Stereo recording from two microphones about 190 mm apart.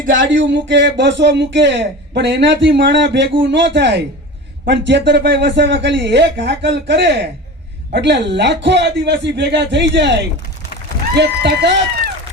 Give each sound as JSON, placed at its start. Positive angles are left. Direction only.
{"t": 0.1, "sound": "speech", "side_deg": -80}